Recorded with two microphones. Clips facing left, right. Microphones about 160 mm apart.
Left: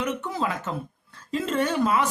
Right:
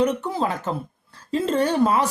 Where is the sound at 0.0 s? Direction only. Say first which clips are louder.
Right 6 dB; 35° right (ahead or behind).